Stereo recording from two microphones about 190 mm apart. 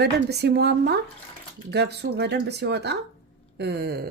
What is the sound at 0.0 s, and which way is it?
Speech, 60° right (ahead or behind).